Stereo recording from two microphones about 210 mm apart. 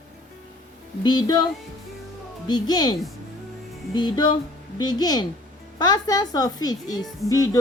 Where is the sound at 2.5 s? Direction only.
20° left (ahead or behind).